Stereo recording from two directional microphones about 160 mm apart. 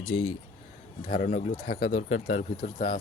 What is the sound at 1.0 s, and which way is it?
Speech, 55° left (ahead or behind).